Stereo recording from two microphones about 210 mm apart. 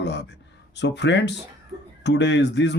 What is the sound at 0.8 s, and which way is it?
Speech, 55° left (ahead or behind).